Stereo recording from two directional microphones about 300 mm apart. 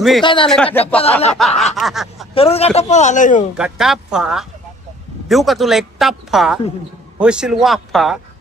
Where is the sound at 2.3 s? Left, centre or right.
Centre.